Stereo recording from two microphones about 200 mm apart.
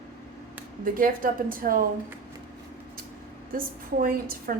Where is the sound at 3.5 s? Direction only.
45° right (ahead or behind).